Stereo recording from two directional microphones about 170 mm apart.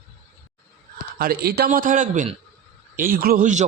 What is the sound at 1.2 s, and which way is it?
Speech, 65° right (ahead or behind).